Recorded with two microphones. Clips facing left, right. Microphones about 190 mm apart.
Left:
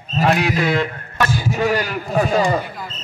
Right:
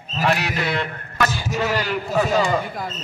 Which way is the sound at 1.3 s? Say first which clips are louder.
Left 4 dB; 45° left (ahead or behind).